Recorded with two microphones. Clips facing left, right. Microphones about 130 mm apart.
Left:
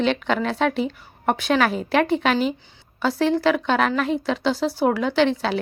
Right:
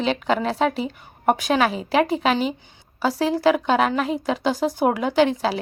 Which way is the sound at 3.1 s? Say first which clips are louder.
Left 3 dB; 35° right (ahead or behind).